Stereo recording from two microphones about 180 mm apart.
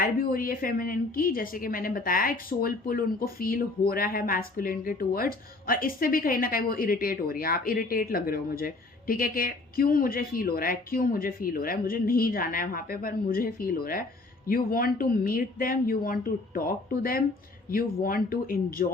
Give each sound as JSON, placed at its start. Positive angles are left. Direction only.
{"t": 0.0, "sound": "a woman's voice", "side_deg": 55}